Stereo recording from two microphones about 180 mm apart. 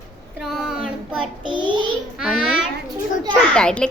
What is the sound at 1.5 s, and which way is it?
Child singing, 25° right (ahead or behind).